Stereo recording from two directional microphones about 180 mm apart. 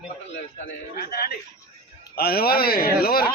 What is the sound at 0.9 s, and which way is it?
A man's voice, 55° left (ahead or behind).